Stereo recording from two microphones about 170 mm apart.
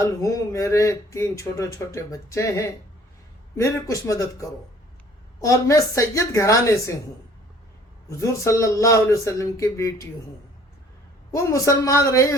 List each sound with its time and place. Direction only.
0.0 s speech: 20° left (ahead or behind)
8.1 s speech: 15° left (ahead or behind)
11.3 s speech: 20° left (ahead or behind)